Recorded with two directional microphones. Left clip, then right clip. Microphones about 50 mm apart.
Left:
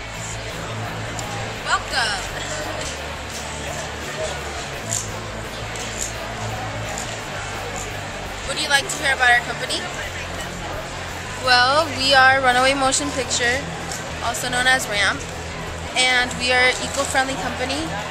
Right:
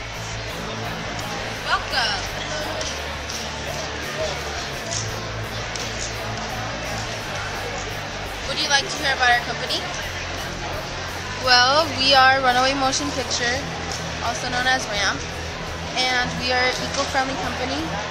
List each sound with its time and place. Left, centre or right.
1.7 s a sound: centre
8.5 s speech: centre
11.4 s speech: centre
12.1 s speech: centre
14.2 s a woman's voice: left